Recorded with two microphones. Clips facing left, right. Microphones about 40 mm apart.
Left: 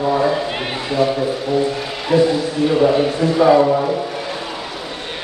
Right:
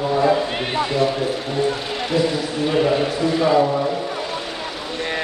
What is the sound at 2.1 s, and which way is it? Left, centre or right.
Speech, left.